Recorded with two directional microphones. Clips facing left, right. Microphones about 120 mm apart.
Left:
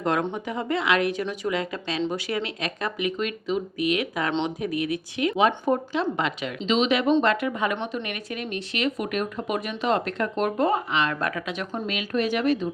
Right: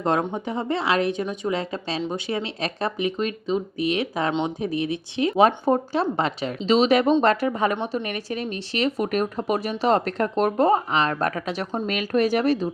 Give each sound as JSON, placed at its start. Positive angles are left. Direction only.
{"t": 0.0, "sound": "speech", "side_deg": -30}